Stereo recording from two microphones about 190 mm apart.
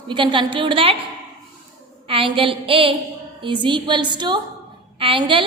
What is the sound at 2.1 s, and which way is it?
A woman's voice, 30° right (ahead or behind).